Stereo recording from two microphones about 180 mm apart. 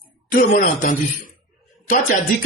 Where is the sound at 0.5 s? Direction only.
50° left (ahead or behind).